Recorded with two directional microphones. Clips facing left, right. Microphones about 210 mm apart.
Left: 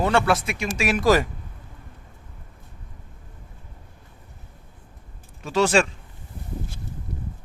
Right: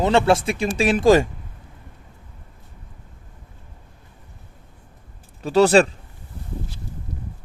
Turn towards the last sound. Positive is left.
turn(degrees=-35)  # may be behind; listen again after turning